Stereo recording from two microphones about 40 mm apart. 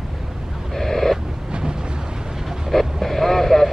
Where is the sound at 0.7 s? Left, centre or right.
Centre.